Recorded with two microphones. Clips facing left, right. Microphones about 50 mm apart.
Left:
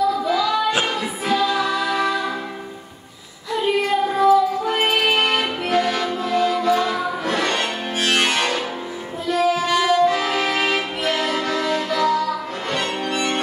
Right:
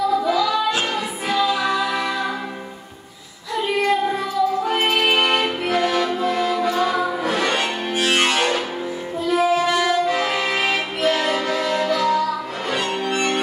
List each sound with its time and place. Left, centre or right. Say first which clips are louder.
0.3 s music: even; centre
3.8 s music: left 4 dB; centre
6.2 s music: left 1 dB; centre
9.6 s music: left 2 dB; centre